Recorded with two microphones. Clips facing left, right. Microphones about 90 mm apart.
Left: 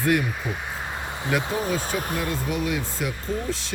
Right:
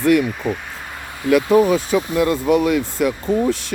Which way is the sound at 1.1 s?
25° left (ahead or behind).